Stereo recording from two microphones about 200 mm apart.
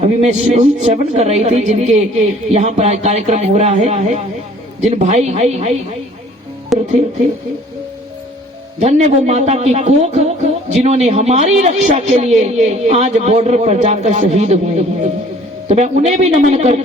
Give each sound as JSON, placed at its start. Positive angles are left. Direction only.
{"t": 0.0, "sound": "speech", "side_deg": -35}
{"t": 6.7, "sound": "speech", "side_deg": 0}
{"t": 8.8, "sound": "speech", "side_deg": -35}